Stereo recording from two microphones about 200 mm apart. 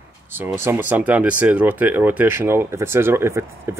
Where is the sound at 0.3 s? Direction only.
10° right (ahead or behind).